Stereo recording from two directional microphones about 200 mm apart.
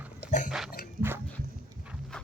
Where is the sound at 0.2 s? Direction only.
40° left (ahead or behind).